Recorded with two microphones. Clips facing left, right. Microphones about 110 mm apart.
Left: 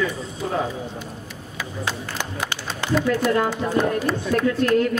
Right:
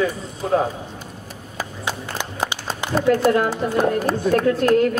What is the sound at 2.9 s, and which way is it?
Speech, 45° right (ahead or behind).